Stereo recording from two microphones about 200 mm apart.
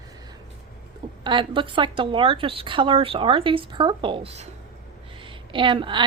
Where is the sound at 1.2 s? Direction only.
25° right (ahead or behind).